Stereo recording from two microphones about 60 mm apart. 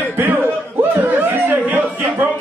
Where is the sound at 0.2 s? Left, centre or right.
Right.